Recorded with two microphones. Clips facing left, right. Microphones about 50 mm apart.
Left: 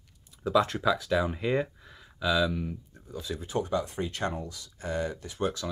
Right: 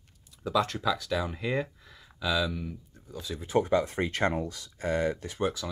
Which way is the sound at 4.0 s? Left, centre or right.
Right.